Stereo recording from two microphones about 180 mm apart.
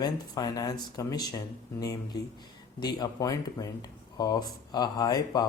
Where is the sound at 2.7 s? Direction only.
25° left (ahead or behind).